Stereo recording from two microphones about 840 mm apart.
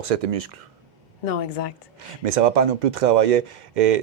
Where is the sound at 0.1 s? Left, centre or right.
Right.